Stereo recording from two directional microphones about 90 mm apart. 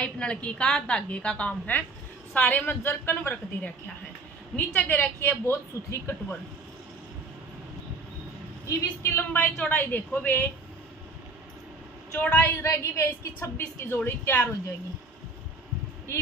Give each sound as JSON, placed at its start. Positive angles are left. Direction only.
{"t": 0.0, "sound": "a woman's voice", "side_deg": 10}
{"t": 8.6, "sound": "a woman's voice", "side_deg": 30}
{"t": 9.6, "sound": "a woman's voice", "side_deg": 15}
{"t": 12.4, "sound": "a woman's voice", "side_deg": 30}